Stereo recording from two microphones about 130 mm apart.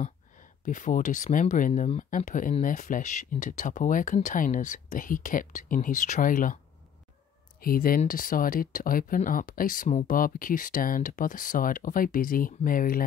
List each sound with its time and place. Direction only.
0.0 s speech: 80° left
2.0 s speech: 85° left
7.7 s speech: 90° left